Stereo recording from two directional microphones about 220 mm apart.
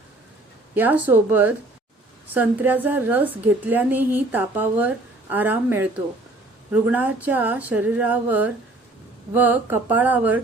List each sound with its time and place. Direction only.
0.7 s a woman's voice: 10° right (ahead or behind)